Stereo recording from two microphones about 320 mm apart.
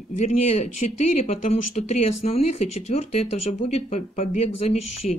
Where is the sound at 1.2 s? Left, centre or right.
Centre.